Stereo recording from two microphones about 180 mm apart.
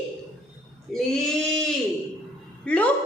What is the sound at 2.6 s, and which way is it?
Speech, 10° left (ahead or behind).